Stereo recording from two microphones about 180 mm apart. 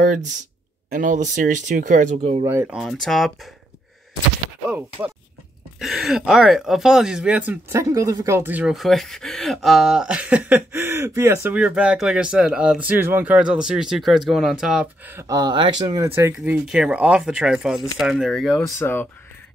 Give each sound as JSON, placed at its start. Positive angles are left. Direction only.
{"t": 0.0, "sound": "speech", "side_deg": -45}
{"t": 2.4, "sound": "speech", "side_deg": -15}
{"t": 2.8, "sound": "speech", "side_deg": 0}
{"t": 5.8, "sound": "speech", "side_deg": -5}
{"t": 16.3, "sound": "speech", "side_deg": -5}
{"t": 18.8, "sound": "speech", "side_deg": 10}